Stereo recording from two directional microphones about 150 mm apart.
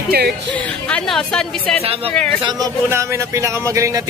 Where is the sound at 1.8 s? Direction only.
40° right (ahead or behind).